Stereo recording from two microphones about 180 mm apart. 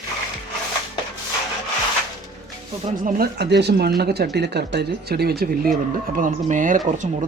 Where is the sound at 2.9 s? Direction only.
50° right (ahead or behind).